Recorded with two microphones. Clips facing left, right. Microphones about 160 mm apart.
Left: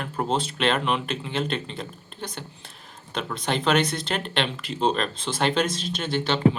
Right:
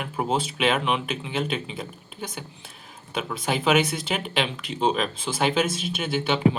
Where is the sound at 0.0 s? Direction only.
5° right (ahead or behind).